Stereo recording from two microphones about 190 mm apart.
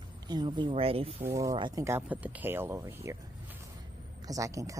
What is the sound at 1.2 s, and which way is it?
Speech, 15° right (ahead or behind).